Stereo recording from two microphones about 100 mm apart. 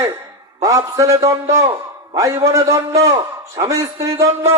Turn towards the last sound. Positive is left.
turn(degrees=-30)  # may be behind; listen again after turning